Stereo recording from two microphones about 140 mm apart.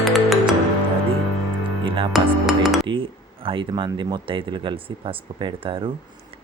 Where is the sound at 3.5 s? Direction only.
35° right (ahead or behind).